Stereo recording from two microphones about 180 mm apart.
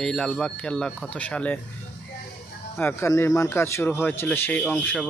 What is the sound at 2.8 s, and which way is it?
Speech, 15° left (ahead or behind).